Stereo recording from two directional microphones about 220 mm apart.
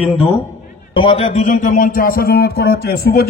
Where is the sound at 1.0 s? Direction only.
25° left (ahead or behind); by 3.2 s 45° left (ahead or behind).